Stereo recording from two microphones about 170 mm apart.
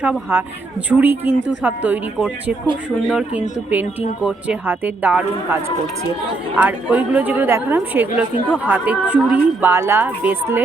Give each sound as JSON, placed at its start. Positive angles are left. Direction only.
{"t": 0.0, "sound": "speech", "side_deg": -10}
{"t": 6.6, "sound": "speech", "side_deg": -10}